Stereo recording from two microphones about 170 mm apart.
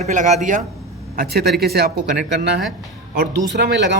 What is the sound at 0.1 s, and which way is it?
Speech, 45° right (ahead or behind).